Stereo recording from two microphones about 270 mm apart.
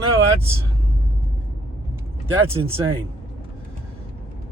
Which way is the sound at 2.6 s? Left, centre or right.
Centre.